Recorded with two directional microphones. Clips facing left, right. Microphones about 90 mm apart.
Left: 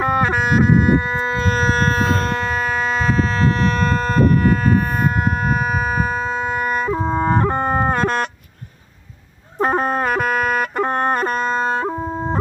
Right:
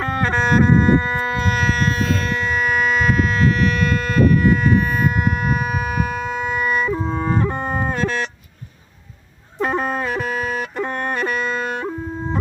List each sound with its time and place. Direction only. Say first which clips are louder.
0.0 s music: left 2 dB; 15° left (ahead or behind)
1.4 s civil defense siren: left 5 dB; 35° left (ahead or behind); by 8.3 s 55° left (ahead or behind)
9.6 s music: left 3 dB; 45° left (ahead or behind)